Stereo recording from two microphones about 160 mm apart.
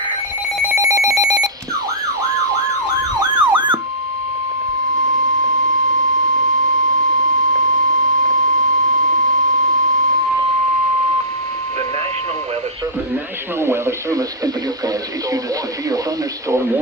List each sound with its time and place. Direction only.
0.7 s telephone bell ringing: 20° right (ahead or behind)
3.2 s emergency vehicle: 30° right (ahead or behind)
13.6 s radio: 15° right (ahead or behind)
16.5 s television: 15° right (ahead or behind)